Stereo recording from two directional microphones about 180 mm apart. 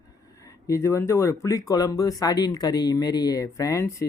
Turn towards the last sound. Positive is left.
turn(degrees=15)  # may be behind; listen again after turning